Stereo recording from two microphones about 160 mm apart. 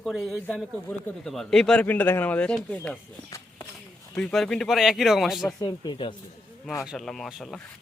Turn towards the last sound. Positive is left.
turn(degrees=0)  # may be behind; listen again after turning